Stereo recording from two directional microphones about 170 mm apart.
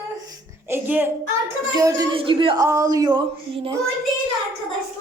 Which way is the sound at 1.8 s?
20° right (ahead or behind).